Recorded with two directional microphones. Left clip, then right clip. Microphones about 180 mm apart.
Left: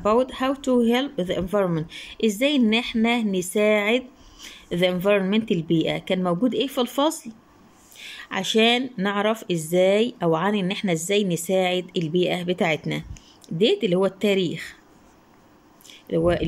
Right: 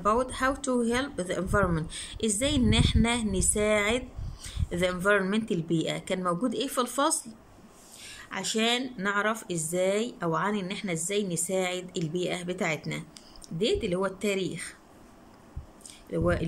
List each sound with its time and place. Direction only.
0.0 s speech: 15° left (ahead or behind)
15.9 s speech: 15° left (ahead or behind)